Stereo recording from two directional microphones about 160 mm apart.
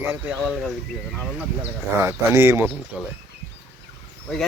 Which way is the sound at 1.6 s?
15° right (ahead or behind).